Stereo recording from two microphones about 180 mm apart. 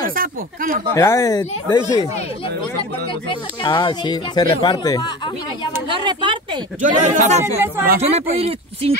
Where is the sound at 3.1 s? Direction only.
25° left (ahead or behind).